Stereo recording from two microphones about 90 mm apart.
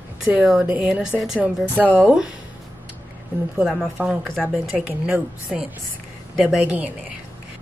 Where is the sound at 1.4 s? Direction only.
15° right (ahead or behind).